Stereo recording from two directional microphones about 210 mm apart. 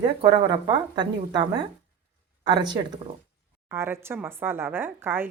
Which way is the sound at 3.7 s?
10° right (ahead or behind).